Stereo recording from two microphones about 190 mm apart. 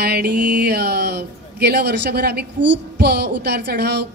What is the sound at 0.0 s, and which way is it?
Speech, 55° right (ahead or behind).